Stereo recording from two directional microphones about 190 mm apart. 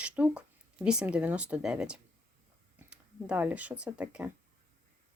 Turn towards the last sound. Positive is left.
turn(degrees=-5)  # may be behind; listen again after turning